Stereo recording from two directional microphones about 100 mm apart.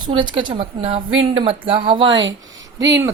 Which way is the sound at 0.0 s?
50° right (ahead or behind).